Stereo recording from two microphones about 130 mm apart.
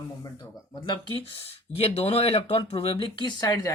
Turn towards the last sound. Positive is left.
turn(degrees=30)  # may be behind; listen again after turning